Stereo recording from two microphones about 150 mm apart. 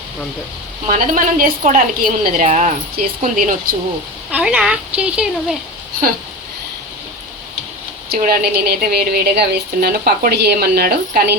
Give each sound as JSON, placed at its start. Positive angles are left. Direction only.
{"t": 0.9, "sound": "a woman's voice", "side_deg": -60}
{"t": 3.0, "sound": "speech", "side_deg": -75}
{"t": 4.3, "sound": "a woman's voice", "side_deg": -10}
{"t": 8.1, "sound": "a woman's voice", "side_deg": -85}